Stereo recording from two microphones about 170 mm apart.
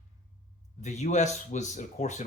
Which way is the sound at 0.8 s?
45° left (ahead or behind).